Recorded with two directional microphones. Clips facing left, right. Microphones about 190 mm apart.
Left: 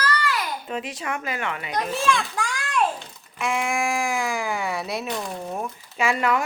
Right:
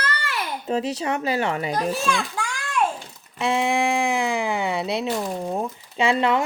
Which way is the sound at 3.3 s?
30° right (ahead or behind).